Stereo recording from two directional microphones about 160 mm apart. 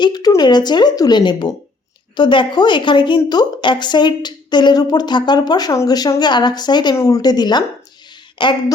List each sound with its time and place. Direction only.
0.0 s speech: 25° left (ahead or behind)